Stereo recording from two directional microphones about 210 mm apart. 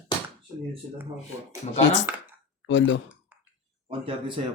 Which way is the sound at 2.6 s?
60° left (ahead or behind).